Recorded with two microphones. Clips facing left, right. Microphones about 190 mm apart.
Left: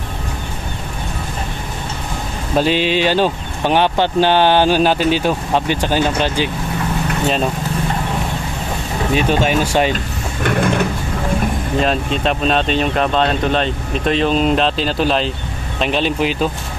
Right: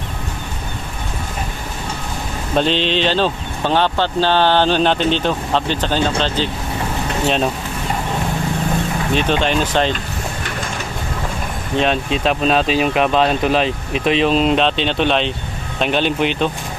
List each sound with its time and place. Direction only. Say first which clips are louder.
2.5 s speech: left 2 dB; 5° left (ahead or behind)
9.1 s speech: left 2 dB; 10° left (ahead or behind)
10.4 s mechanisms: left 10 dB; 60° left (ahead or behind)
11.8 s speech: right 1 dB; centre (ahead or behind)